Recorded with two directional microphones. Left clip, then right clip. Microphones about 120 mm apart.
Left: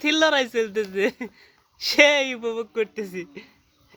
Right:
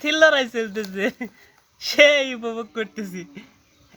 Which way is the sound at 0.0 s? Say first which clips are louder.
Right 3 dB; 35° left (ahead or behind).